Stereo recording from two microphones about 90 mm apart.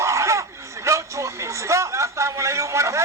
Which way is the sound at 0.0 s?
35° right (ahead or behind).